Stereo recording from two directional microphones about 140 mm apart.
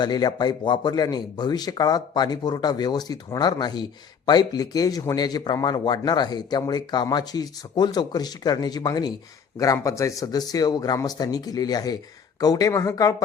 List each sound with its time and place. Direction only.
0.0 s speech: 30° left (ahead or behind)